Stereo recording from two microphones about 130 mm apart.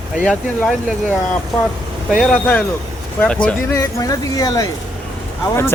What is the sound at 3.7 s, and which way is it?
Speech, 25° left (ahead or behind).